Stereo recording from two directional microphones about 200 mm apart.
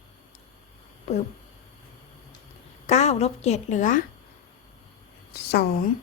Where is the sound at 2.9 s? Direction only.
35° left (ahead or behind).